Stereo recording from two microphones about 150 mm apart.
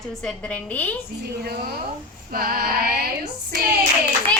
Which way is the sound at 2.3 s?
80° right.